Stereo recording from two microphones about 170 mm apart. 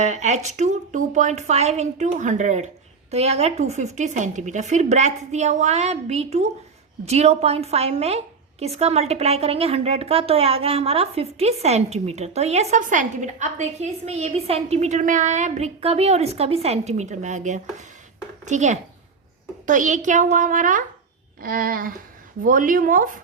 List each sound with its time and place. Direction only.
0.0 s a woman's voice: 45° right (ahead or behind)
21.4 s a sound: 55° right (ahead or behind)
22.4 s a woman's voice: 50° right (ahead or behind)